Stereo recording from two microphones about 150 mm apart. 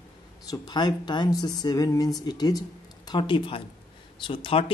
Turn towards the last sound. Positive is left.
turn(degrees=35)  # may be behind; listen again after turning